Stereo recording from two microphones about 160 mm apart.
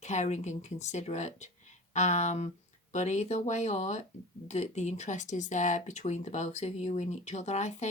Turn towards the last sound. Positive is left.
turn(degrees=45)  # may be behind; listen again after turning